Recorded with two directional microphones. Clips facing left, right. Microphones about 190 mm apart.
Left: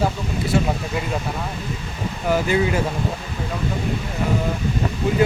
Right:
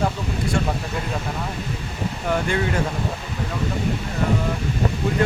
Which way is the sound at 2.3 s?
5° left (ahead or behind).